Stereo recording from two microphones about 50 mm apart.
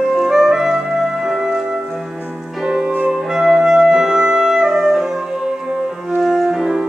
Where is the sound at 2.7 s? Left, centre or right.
Centre.